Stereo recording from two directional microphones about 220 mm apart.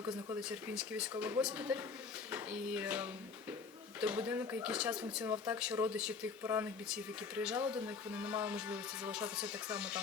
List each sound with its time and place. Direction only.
0.0 s speech: 20° right (ahead or behind)
0.3 s speech: 5° right (ahead or behind)